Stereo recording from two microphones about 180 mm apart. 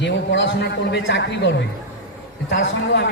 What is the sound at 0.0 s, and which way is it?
A man's voice, 90° left.